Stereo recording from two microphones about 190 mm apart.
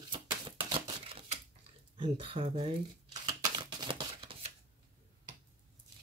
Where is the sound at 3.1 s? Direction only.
20° right (ahead or behind).